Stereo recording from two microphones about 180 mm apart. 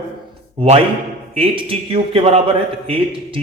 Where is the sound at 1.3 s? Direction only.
30° right (ahead or behind).